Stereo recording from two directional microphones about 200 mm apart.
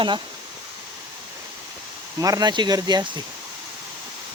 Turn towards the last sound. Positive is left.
turn(degrees=-20)  # may be behind; listen again after turning